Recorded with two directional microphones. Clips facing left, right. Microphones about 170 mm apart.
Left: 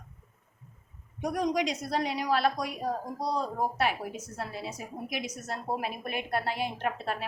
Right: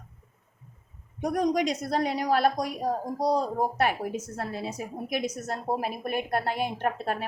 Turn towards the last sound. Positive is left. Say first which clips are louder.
# right 3 dB
turn(degrees=-50)  # may be behind; listen again after turning